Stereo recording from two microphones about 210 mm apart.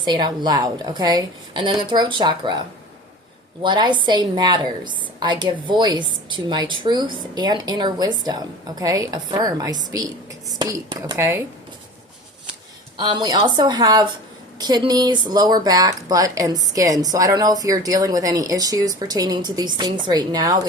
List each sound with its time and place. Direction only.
0.0 s a woman's voice: 20° right (ahead or behind)
13.0 s a woman's voice: 20° right (ahead or behind)